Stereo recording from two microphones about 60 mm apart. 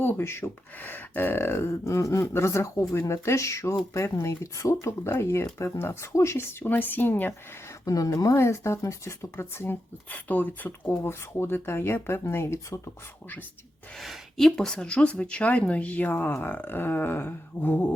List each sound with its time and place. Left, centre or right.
0.0 s speech: left
0.8 s speech: left
1.8 s speech: left
7.9 s speech: left
8.4 s speech: left
9.3 s speech: left
10.1 s speech: left
14.0 s speech: centre; by 17.8 s left